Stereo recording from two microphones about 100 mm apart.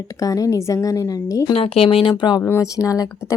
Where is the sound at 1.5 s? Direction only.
75° left (ahead or behind).